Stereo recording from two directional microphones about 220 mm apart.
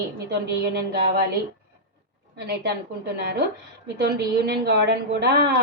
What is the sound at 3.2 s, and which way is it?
A woman's voice, 45° right (ahead or behind).